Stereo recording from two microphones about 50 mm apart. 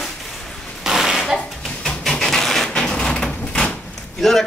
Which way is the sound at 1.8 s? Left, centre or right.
Centre.